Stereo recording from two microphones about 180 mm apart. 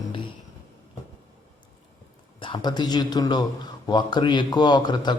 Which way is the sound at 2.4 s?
25° left (ahead or behind).